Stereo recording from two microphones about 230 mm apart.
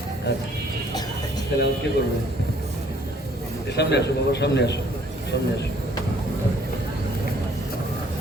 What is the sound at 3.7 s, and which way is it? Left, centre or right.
A man's voice, left.